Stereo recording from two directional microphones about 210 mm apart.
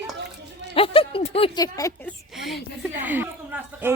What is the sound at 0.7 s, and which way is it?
A woman's voice, 25° left (ahead or behind).